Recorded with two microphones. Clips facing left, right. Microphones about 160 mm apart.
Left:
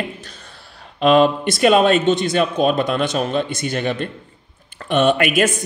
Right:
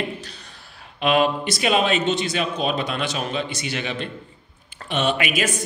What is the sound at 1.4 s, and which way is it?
Speech, 50° left (ahead or behind).